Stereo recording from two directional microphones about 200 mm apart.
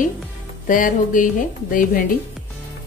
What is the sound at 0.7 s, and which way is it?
A woman's voice, 40° left (ahead or behind).